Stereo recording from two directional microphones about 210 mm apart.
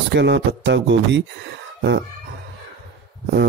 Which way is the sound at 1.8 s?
50° right (ahead or behind).